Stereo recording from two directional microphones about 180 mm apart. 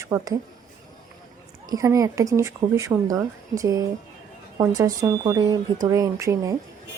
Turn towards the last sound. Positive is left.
turn(degrees=-20)  # may be behind; listen again after turning